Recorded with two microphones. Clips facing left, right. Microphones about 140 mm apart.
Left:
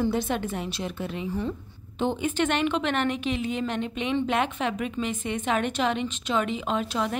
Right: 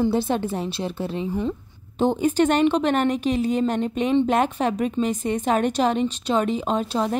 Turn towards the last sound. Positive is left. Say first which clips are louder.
# right 4 dB
turn(degrees=-35)  # may be behind; listen again after turning